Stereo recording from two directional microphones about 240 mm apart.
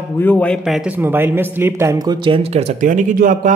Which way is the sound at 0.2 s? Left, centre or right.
Centre.